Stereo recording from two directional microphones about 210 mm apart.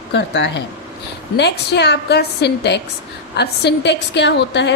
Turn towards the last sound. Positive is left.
turn(degrees=55)  # may be behind; listen again after turning